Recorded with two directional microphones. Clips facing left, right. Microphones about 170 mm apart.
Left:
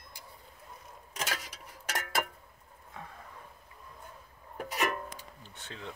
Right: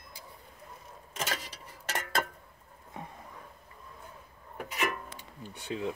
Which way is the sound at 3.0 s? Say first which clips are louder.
Right 3 dB; 20° right (ahead or behind).